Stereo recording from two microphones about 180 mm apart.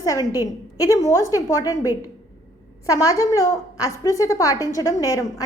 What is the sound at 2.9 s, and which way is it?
A woman's voice, 20° left (ahead or behind).